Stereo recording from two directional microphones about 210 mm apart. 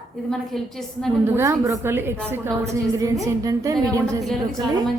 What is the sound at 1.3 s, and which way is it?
A woman's voice, 15° right (ahead or behind).